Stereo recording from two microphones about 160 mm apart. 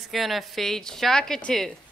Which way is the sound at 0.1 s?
Centre (ahead or behind).